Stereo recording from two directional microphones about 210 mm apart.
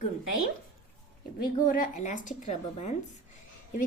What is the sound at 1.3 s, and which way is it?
A woman's voice, 40° left (ahead or behind).